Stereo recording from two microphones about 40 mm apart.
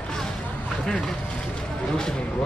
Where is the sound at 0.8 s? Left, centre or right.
Left.